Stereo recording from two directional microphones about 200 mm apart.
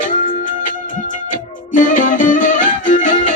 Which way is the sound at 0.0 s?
40° left (ahead or behind).